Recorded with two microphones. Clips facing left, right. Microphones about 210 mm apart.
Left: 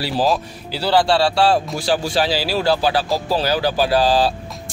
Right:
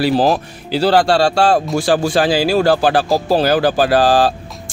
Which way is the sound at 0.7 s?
45° right (ahead or behind).